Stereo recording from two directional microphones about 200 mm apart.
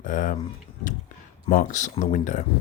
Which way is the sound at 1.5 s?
40° left (ahead or behind).